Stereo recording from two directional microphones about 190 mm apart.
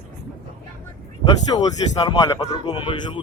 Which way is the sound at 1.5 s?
20° left (ahead or behind).